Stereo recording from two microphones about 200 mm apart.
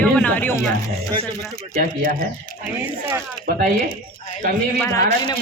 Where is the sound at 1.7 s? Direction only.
40° right (ahead or behind).